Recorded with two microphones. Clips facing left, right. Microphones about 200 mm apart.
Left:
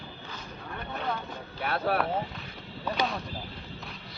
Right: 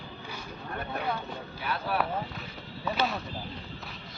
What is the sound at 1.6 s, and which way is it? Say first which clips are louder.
Speech: left 4 dB; 60° left (ahead or behind).